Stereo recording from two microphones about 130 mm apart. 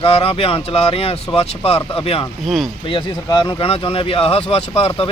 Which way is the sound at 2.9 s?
40° left (ahead or behind).